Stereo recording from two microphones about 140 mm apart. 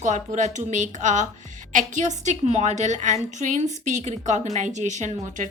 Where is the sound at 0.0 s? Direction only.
60° right (ahead or behind).